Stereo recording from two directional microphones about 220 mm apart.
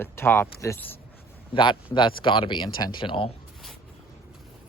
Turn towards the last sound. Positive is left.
turn(degrees=25)  # may be behind; listen again after turning